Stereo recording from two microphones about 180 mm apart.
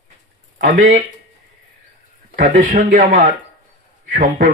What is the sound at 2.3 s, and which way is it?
Speech, 50° right (ahead or behind).